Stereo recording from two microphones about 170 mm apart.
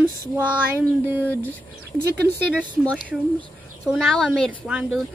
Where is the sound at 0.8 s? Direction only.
10° right (ahead or behind).